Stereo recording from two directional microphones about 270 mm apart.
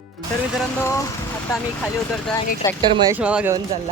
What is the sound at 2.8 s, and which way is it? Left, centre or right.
Speech, centre.